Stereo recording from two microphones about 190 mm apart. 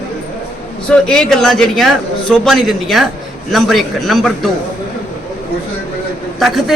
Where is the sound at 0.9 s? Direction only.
5° left (ahead or behind).